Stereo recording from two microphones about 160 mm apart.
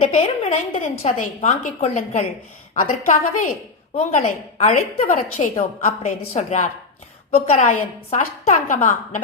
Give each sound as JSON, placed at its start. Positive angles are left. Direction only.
{"t": 0.0, "sound": "a woman's voice", "side_deg": 45}
{"t": 5.0, "sound": "a woman's voice", "side_deg": 55}